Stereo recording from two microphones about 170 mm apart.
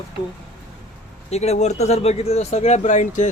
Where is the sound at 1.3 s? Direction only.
40° left (ahead or behind).